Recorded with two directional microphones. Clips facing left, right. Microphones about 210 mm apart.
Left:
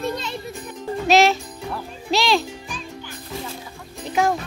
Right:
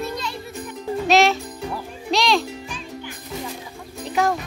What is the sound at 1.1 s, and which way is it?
Music, centre (ahead or behind).